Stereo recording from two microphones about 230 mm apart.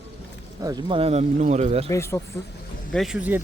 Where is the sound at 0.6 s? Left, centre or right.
Centre.